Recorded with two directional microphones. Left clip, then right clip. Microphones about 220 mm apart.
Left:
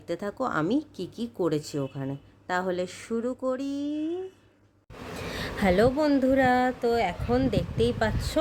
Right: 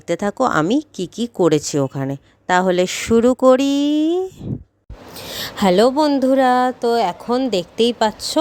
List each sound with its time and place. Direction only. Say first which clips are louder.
0.1 s speech: right 12 dB; 35° right (ahead or behind)
5.3 s speech: right 9 dB; 30° right (ahead or behind)